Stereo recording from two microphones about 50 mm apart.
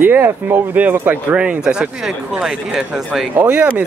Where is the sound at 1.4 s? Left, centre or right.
Centre.